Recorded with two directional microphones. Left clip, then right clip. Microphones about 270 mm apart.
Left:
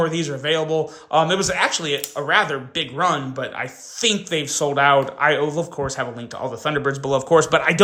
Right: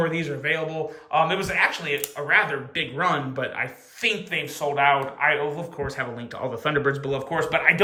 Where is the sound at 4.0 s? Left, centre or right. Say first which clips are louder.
Left 4 dB; left.